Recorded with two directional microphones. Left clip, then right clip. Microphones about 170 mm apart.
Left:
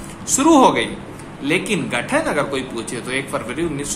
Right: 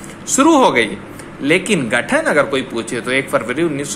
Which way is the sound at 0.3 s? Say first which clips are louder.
Right 2 dB; 25° right (ahead or behind).